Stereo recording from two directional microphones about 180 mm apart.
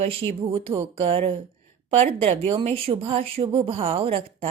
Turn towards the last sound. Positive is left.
turn(degrees=-35)  # may be behind; listen again after turning